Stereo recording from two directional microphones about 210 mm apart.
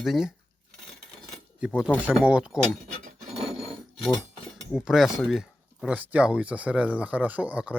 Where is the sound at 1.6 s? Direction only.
5° right (ahead or behind).